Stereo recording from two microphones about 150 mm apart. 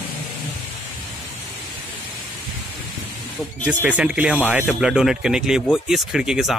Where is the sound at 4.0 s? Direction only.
5° right (ahead or behind).